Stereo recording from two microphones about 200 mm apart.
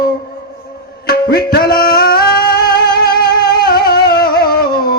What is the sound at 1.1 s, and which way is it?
Music, 50° left (ahead or behind).